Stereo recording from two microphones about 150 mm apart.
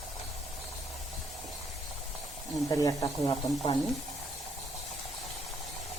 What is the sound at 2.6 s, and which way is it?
Speech, 25° left (ahead or behind).